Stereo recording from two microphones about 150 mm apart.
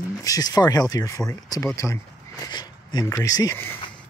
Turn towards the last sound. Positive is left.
turn(degrees=15)  # may be behind; listen again after turning